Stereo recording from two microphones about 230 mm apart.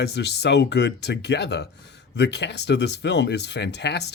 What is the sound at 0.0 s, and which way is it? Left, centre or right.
Speech, left.